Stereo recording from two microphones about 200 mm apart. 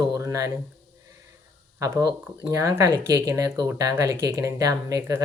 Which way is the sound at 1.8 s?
15° right (ahead or behind).